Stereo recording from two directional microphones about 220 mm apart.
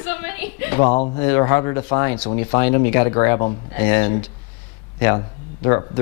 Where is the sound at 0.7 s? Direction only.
20° left (ahead or behind).